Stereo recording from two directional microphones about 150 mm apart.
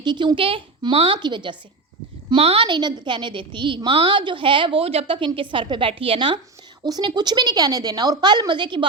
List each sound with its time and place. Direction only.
0.0 s a woman's voice: 30° right (ahead or behind)